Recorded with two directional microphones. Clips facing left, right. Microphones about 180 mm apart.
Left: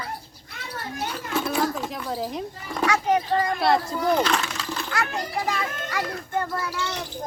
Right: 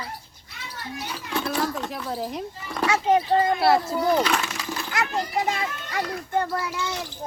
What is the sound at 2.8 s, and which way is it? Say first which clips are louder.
Speech: right 2 dB; 25° right (ahead or behind).